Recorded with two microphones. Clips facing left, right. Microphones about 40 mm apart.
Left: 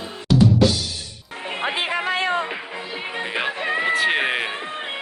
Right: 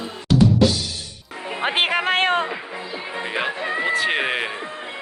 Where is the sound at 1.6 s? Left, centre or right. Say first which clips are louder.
Right 3 dB; right.